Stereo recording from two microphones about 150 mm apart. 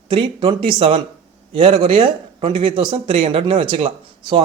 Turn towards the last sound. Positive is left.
turn(degrees=-35)  # may be behind; listen again after turning